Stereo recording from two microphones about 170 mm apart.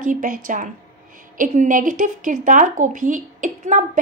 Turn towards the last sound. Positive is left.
turn(degrees=-50)  # may be behind; listen again after turning